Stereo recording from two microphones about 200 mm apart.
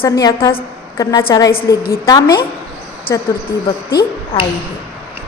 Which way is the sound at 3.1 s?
45° left (ahead or behind).